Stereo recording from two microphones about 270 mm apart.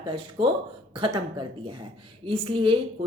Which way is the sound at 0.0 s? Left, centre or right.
Centre.